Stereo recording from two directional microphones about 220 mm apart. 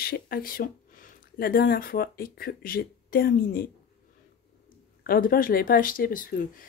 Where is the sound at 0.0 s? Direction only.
40° left (ahead or behind).